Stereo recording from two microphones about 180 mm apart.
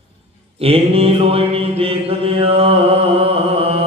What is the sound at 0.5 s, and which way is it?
Mantra, 30° right (ahead or behind).